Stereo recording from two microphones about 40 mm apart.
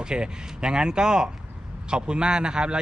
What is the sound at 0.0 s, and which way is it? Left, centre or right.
A man's voice, right.